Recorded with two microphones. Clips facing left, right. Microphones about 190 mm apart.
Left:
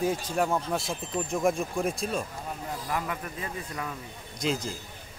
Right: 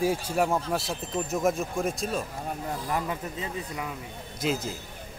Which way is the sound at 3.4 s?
15° right (ahead or behind).